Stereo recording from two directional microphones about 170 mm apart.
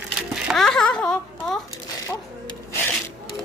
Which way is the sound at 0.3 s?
Centre (ahead or behind).